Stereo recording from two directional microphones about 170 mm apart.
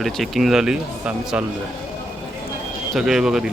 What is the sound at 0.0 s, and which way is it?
Speech, centre (ahead or behind).